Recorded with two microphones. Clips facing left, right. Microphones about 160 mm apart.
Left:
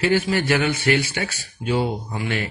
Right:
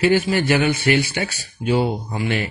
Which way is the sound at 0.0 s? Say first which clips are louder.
Right 3 dB; 15° right (ahead or behind).